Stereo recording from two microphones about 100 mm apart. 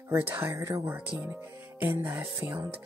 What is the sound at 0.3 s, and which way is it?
Music, 25° right (ahead or behind).